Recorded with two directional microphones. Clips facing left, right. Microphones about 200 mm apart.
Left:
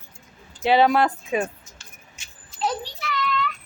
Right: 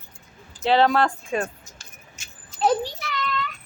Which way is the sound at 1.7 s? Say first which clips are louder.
Right 1 dB; 45° right (ahead or behind).